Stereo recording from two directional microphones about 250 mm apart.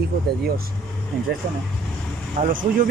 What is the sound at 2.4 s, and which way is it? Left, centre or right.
Speech, right.